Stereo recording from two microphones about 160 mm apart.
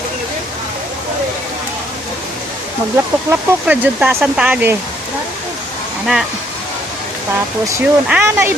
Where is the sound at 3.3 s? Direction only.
10° right (ahead or behind).